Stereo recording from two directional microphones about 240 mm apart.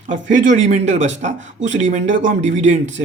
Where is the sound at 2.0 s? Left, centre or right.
Right.